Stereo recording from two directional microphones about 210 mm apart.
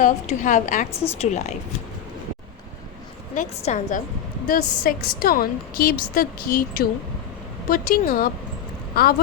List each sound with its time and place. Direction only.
0.0 s a woman's voice: 35° left (ahead or behind)
3.3 s a woman's voice: 35° left (ahead or behind)